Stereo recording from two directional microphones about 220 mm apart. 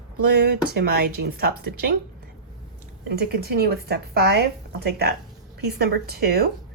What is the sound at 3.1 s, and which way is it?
A woman's voice, 45° right (ahead or behind).